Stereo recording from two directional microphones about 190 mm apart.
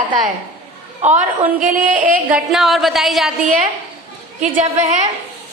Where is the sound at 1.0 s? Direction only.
40° right (ahead or behind).